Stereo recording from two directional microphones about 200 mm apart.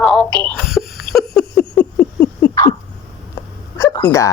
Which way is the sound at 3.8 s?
15° left (ahead or behind).